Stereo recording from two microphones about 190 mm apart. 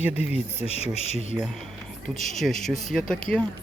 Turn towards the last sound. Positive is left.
turn(degrees=5)  # may be behind; listen again after turning